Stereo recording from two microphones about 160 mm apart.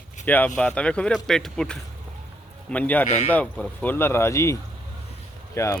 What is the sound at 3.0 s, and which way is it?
Speech, 45° left (ahead or behind).